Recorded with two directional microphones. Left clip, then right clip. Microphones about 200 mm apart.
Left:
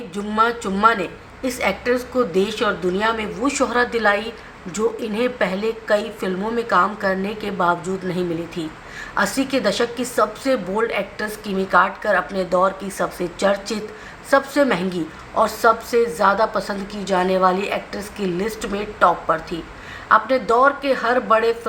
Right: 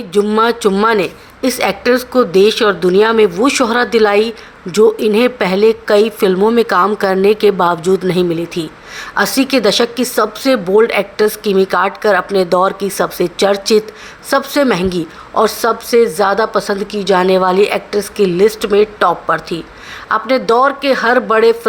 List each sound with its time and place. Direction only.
0.1 s a woman's voice: 45° right (ahead or behind)